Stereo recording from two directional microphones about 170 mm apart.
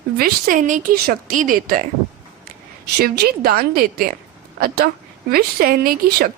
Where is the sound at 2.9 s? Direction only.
70° right (ahead or behind).